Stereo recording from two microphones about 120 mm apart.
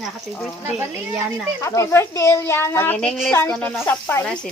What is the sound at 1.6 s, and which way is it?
Speech, 25° left (ahead or behind).